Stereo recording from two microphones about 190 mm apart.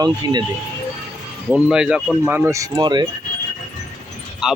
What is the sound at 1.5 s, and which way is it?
Speech, 5° right (ahead or behind).